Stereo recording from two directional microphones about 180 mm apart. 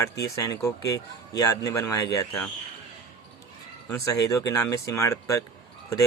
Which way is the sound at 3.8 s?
15° left (ahead or behind).